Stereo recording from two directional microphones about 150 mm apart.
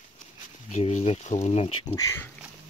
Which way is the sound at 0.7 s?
50° left (ahead or behind).